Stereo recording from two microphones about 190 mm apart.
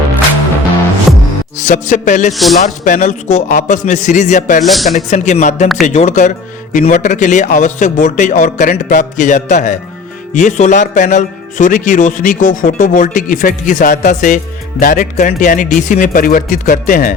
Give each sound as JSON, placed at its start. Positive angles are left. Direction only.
{"t": 1.6, "sound": "speech", "side_deg": 40}
{"t": 2.3, "sound": "a man's voice", "side_deg": 0}
{"t": 2.6, "sound": "speech", "side_deg": 40}
{"t": 4.6, "sound": "a man's voice", "side_deg": 0}
{"t": 4.9, "sound": "speech", "side_deg": 40}